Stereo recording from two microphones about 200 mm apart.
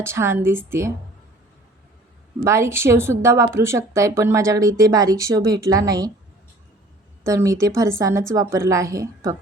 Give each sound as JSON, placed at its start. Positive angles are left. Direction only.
{"t": 0.0, "sound": "speech", "side_deg": -15}
{"t": 2.4, "sound": "speech", "side_deg": -15}
{"t": 7.3, "sound": "speech", "side_deg": -15}